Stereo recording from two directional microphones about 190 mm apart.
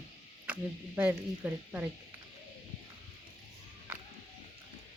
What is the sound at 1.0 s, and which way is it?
Speech, 10° right (ahead or behind).